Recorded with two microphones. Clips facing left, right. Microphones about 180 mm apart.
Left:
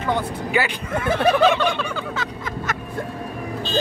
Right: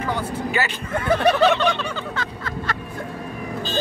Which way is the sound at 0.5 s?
15° left (ahead or behind).